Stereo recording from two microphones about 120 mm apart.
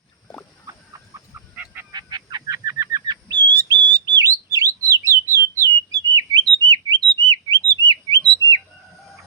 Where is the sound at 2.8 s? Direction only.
30° right (ahead or behind).